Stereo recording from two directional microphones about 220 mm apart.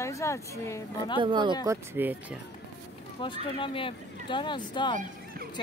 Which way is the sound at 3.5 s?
25° left (ahead or behind).